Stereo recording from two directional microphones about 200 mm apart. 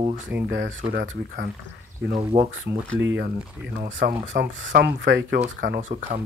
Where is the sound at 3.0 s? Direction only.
65° right (ahead or behind).